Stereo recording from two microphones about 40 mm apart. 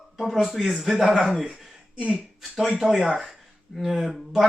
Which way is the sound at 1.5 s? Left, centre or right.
Right.